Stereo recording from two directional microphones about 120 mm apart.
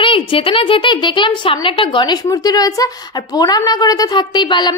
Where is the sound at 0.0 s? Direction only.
45° left (ahead or behind).